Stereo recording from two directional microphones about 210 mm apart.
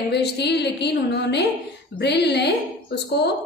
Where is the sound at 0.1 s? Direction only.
55° left (ahead or behind).